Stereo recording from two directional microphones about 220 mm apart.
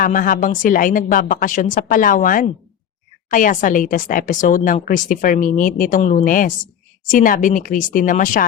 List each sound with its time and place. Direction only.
0.0 s speech: 40° left (ahead or behind)